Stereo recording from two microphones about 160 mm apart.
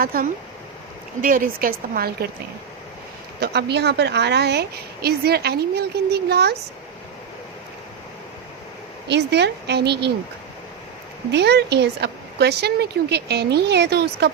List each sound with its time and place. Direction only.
0.0 s a woman's voice: 65° right (ahead or behind)
3.4 s a woman's voice: 90° right
9.0 s a woman's voice: 90° right
11.3 s a woman's voice: 90° right